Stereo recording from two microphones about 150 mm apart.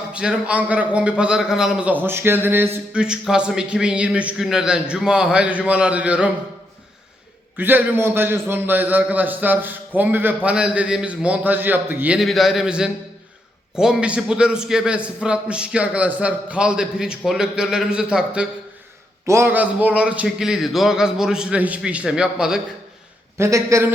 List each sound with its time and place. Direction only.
0.1 s a man's voice: 5° right (ahead or behind)
7.5 s a man's voice: 10° right (ahead or behind)
19.2 s a man's voice: 20° right (ahead or behind)
23.4 s speech: 20° right (ahead or behind)